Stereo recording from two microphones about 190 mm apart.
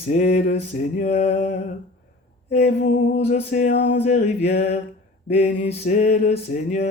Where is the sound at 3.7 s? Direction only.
65° left (ahead or behind).